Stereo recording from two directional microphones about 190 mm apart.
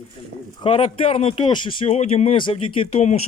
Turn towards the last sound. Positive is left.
turn(degrees=35)  # may be behind; listen again after turning